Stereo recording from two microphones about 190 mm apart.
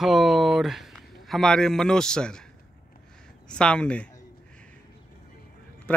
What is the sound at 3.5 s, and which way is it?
Speech, 5° left (ahead or behind).